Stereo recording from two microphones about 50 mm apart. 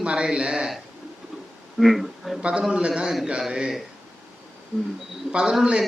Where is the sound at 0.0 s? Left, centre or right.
Centre.